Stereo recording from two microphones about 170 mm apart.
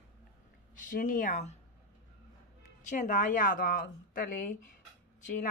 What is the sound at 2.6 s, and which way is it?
A woman's voice, 45° left (ahead or behind).